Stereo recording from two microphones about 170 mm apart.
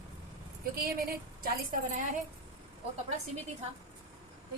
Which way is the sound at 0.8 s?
60° right (ahead or behind).